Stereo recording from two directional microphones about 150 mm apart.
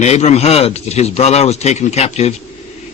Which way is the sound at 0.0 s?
45° left (ahead or behind).